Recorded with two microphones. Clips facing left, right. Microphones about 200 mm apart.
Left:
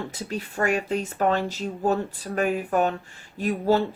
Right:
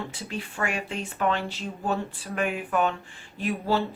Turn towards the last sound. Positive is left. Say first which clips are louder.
# left 4 dB
turn(degrees=45)  # may be behind; listen again after turning